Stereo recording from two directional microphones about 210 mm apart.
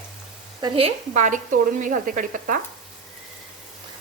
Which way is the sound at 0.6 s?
25° right (ahead or behind).